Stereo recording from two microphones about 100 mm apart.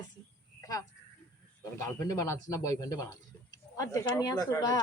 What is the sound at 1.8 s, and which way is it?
A woman's voice, 35° left (ahead or behind).